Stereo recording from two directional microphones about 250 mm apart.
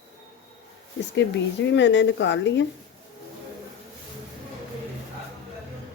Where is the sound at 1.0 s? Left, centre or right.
Left.